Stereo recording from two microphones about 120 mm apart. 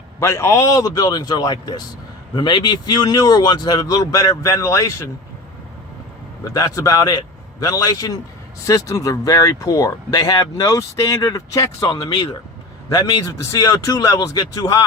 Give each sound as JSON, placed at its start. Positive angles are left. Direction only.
{"t": 0.2, "sound": "speech", "side_deg": 25}
{"t": 6.5, "sound": "speech", "side_deg": 30}
{"t": 11.9, "sound": "speech", "side_deg": 40}